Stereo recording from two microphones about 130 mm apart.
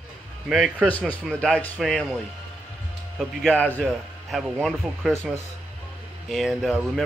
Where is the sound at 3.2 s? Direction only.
5° left (ahead or behind).